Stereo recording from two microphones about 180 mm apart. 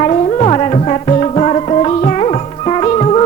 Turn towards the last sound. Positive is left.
turn(degrees=35)  # may be behind; listen again after turning